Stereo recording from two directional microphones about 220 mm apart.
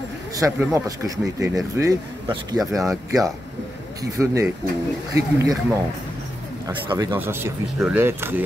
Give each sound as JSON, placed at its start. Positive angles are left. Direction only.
{"t": 0.4, "sound": "speech", "side_deg": -10}
{"t": 4.2, "sound": "speech", "side_deg": -15}